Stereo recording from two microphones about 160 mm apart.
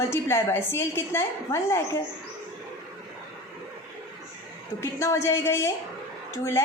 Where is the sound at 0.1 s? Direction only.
15° left (ahead or behind).